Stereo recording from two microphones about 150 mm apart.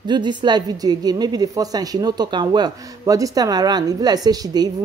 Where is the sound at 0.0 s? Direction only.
30° right (ahead or behind).